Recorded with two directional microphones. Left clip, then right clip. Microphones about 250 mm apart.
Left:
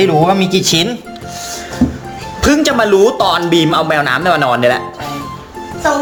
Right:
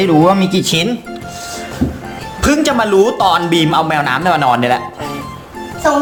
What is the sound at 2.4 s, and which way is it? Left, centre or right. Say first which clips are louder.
Speech: left 2 dB; centre.